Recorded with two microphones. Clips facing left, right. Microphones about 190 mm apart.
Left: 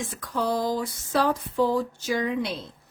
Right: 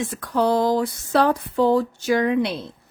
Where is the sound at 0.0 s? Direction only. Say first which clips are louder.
Right 7 dB; 70° right (ahead or behind).